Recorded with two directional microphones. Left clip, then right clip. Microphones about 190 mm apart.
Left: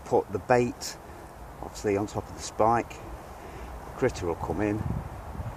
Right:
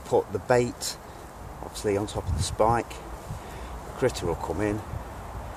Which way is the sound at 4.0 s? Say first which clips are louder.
Right 1 dB; 30° left (ahead or behind).